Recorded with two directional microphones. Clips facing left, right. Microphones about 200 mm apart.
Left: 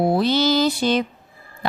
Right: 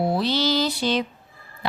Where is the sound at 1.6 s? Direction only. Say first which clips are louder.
Left 3 dB; 50° left (ahead or behind).